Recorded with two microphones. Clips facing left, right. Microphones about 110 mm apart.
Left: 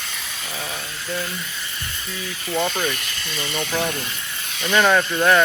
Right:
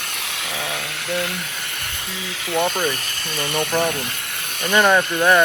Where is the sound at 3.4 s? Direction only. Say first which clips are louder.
Right 4 dB; 55° right (ahead or behind).